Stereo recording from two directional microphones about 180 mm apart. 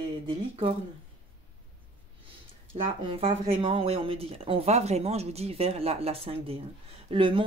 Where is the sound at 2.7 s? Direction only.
30° right (ahead or behind).